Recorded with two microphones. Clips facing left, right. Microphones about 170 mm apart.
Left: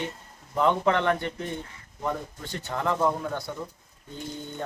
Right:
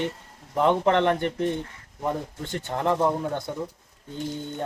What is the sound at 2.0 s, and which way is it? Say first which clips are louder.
Speech: right 3 dB; 20° right (ahead or behind).